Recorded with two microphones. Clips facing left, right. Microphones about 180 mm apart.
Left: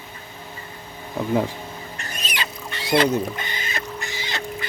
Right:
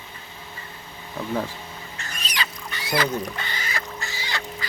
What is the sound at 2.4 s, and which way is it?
Rodents, 25° left (ahead or behind).